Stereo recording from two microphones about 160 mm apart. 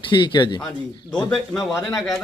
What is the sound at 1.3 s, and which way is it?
Speech, 5° left (ahead or behind).